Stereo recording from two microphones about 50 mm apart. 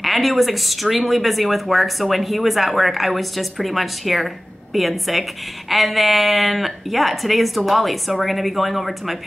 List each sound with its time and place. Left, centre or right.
0.0 s speech: centre